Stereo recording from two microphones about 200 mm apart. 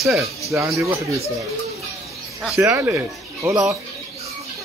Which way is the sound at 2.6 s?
10° right (ahead or behind).